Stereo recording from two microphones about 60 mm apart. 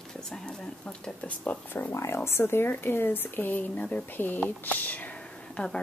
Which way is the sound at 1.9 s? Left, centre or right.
Left.